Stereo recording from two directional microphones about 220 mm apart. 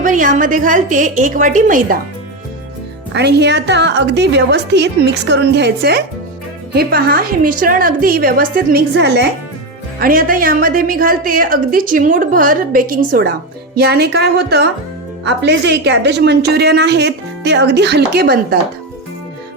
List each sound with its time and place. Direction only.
0.0 s a woman's voice: 35° right (ahead or behind)
3.1 s a woman's voice: 50° right (ahead or behind)
10.0 s a woman's voice: 40° right (ahead or behind)